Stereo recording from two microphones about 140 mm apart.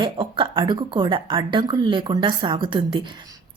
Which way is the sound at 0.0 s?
35° right (ahead or behind).